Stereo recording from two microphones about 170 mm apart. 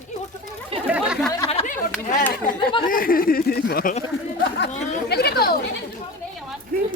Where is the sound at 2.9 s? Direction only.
55° left (ahead or behind).